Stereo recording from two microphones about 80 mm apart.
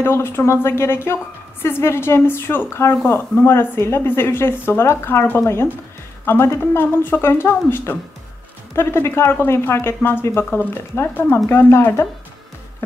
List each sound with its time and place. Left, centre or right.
0.0 s speech: left